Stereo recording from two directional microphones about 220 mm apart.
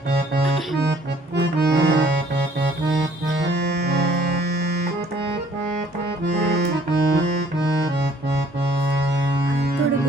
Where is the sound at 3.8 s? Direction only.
50° right (ahead or behind).